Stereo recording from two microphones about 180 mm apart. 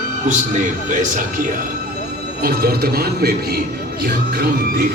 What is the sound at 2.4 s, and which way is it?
Speech, 60° right (ahead or behind).